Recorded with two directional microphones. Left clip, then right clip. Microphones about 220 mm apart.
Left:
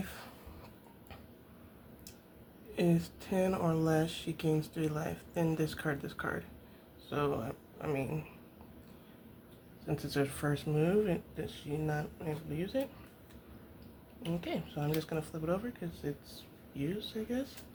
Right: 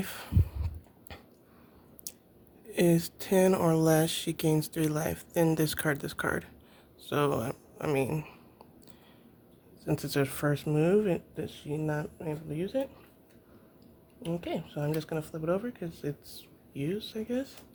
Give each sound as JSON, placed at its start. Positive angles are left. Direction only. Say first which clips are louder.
{"t": 0.0, "sound": "heart sounds", "louder": "right 6 dB", "side_deg": -45}
{"t": 2.7, "sound": "speech", "louder": "right 6 dB", "side_deg": -50}
{"t": 9.8, "sound": "speech", "louder": "right 4 dB", "side_deg": -55}
{"t": 14.2, "sound": "speech", "louder": "right 4 dB", "side_deg": -45}